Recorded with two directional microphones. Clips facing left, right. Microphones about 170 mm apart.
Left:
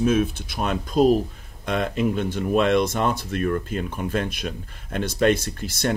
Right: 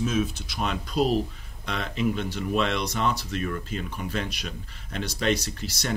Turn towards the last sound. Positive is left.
turn(degrees=50)  # may be behind; listen again after turning